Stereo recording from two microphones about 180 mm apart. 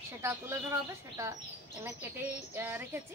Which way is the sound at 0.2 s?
15° right (ahead or behind).